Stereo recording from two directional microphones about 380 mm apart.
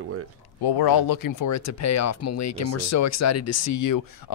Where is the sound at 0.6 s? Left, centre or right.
Left.